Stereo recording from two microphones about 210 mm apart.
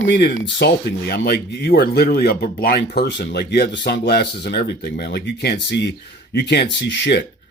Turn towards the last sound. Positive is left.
turn(degrees=55)  # may be behind; listen again after turning